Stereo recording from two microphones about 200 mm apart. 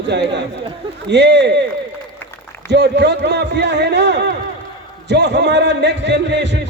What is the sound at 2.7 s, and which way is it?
A man's voice, 55° right (ahead or behind).